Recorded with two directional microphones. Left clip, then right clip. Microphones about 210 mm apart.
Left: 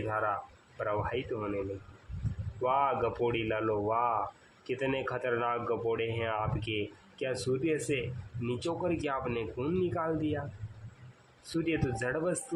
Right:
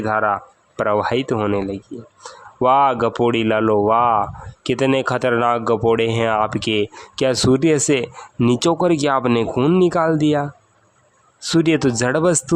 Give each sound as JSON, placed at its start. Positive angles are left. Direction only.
{"t": 0.1, "sound": "speech", "side_deg": -50}
{"t": 2.6, "sound": "speech", "side_deg": -50}
{"t": 11.5, "sound": "speech", "side_deg": -55}